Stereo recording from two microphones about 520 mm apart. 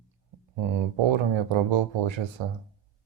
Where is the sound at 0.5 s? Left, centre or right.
Right.